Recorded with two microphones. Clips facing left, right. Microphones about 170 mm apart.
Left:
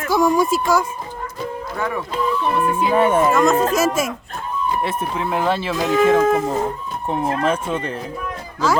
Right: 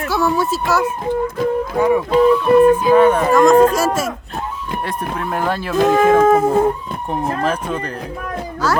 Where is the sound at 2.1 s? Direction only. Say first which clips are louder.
Right 11 dB; 70° right (ahead or behind).